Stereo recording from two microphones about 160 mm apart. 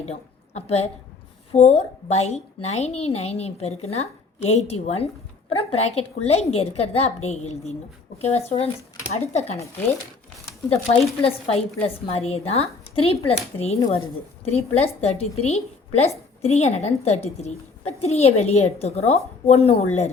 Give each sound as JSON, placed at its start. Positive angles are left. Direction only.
{"t": 0.0, "sound": "a woman's voice", "side_deg": 45}
{"t": 9.6, "sound": "speech", "side_deg": 15}
{"t": 11.2, "sound": "a woman's voice", "side_deg": 40}